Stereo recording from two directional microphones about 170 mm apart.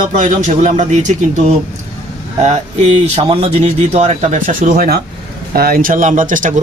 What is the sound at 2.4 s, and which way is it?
Speech, 40° right (ahead or behind).